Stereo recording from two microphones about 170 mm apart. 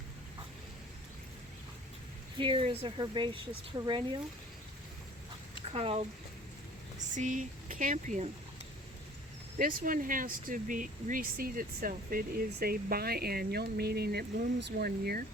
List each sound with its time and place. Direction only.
2.4 s a woman's voice: 30° right (ahead or behind)
5.7 s speech: 35° right (ahead or behind)
7.1 s speech: 50° right (ahead or behind)
9.6 s speech: 50° right (ahead or behind)